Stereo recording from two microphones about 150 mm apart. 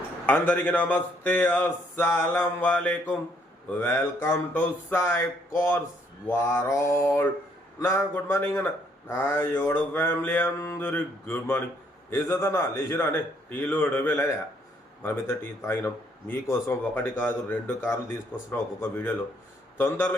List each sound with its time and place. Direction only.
0.3 s a man's voice: 15° left (ahead or behind)